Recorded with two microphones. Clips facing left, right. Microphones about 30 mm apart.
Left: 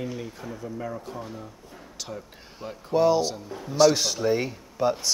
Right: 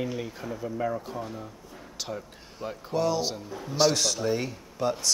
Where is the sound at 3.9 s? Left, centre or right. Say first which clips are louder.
Left 2 dB; centre.